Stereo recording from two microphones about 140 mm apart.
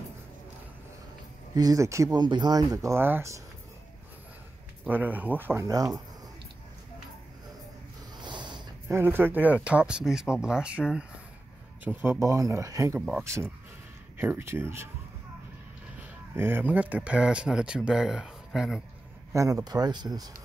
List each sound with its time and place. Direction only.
1.5 s speech: 25° right (ahead or behind)
4.8 s speech: 15° right (ahead or behind)
8.2 s snort: 35° right (ahead or behind)
8.8 s speech: 15° right (ahead or behind)
16.0 s speech: 15° right (ahead or behind)
19.3 s speech: 25° right (ahead or behind)